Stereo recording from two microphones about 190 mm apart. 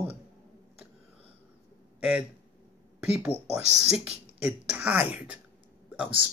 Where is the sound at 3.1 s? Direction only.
5° right (ahead or behind).